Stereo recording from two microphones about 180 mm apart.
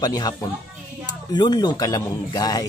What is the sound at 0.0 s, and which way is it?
Speech, 20° left (ahead or behind).